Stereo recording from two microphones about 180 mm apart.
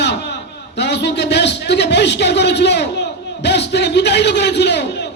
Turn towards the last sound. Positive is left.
turn(degrees=70)  # may be behind; listen again after turning